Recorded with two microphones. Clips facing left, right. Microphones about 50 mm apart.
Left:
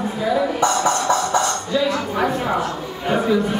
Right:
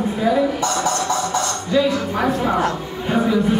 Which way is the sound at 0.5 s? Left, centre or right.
Left.